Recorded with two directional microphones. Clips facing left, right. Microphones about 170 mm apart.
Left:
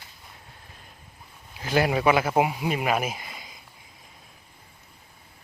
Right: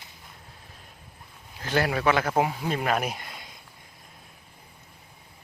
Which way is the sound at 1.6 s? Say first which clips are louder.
Left 2 dB; 15° left (ahead or behind).